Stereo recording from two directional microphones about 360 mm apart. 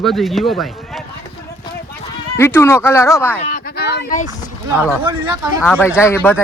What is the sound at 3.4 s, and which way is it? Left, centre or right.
Speech, left.